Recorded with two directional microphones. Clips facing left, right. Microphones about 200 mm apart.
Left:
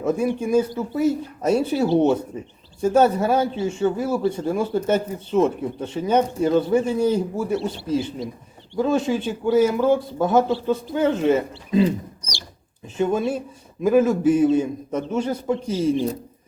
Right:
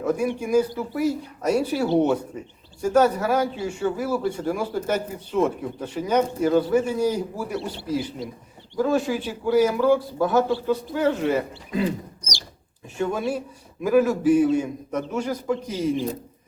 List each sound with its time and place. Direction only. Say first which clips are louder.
0.0 s a man's voice: left 2 dB; 25° left (ahead or behind)
13.0 s a man's voice: left 3 dB; 20° left (ahead or behind)